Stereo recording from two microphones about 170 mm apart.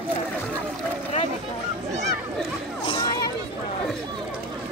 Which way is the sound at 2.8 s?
30° left (ahead or behind).